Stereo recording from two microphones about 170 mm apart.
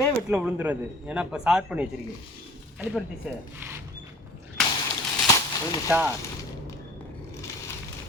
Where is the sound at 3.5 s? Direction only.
15° right (ahead or behind).